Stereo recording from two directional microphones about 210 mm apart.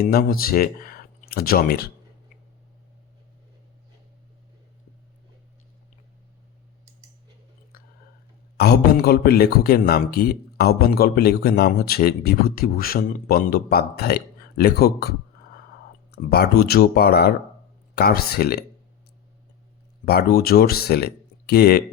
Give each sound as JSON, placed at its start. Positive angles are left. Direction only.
{"t": 0.0, "sound": "a man's voice", "side_deg": 45}
{"t": 7.7, "sound": "chewing", "side_deg": 45}
{"t": 8.5, "sound": "a man's voice", "side_deg": 50}
{"t": 16.1, "sound": "a man's voice", "side_deg": 50}
{"t": 20.3, "sound": "speech", "side_deg": 45}